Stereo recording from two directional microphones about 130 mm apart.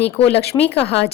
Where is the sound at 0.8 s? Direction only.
50° left (ahead or behind).